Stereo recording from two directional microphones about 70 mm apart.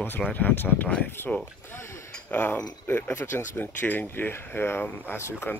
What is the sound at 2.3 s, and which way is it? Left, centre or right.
Speech, left.